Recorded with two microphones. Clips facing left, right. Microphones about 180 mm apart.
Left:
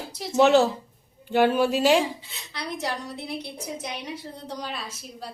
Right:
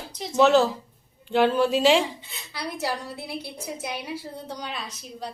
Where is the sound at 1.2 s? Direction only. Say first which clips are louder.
Even; 5° left (ahead or behind).